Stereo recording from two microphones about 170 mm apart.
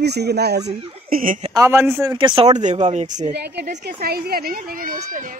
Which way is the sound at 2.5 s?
45° right (ahead or behind).